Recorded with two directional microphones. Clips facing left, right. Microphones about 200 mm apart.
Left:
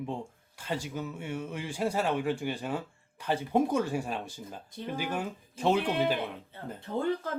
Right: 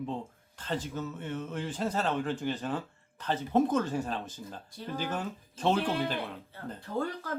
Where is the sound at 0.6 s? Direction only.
10° left (ahead or behind).